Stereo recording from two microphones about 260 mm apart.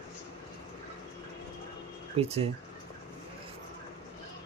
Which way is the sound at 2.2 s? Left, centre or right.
Right.